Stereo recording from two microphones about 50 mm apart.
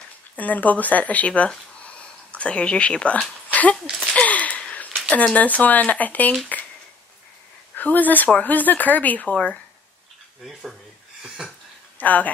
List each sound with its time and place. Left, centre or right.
0.4 s speech: left
2.0 s a sound: left
3.8 s speech: centre
4.1 s gasp: left
4.6 s a sound: left
5.1 s speech: left
7.7 s speech: left
10.4 s speech: centre
11.2 s a sound: centre
12.0 s speech: left